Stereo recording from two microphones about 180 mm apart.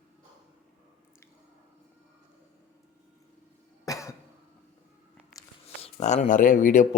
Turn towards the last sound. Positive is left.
turn(degrees=45)  # may be behind; listen again after turning